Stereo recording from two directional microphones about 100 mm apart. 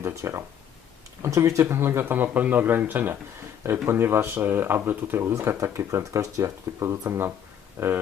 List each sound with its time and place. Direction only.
0.0 s speech: 30° right (ahead or behind)